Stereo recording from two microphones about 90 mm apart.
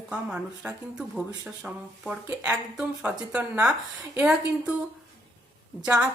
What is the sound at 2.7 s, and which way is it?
Speech, 10° right (ahead or behind).